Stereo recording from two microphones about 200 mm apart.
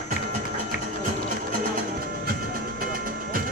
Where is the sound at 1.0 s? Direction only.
40° right (ahead or behind).